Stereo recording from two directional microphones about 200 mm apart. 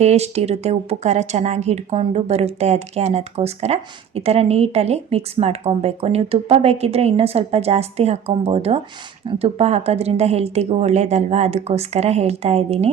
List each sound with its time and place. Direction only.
0.0 s speech: 35° right (ahead or behind)